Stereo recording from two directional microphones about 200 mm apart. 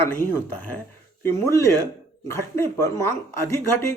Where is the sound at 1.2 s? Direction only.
15° left (ahead or behind).